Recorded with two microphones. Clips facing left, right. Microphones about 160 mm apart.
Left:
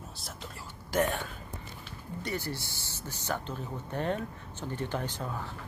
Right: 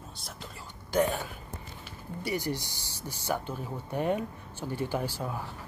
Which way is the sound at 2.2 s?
15° right (ahead or behind).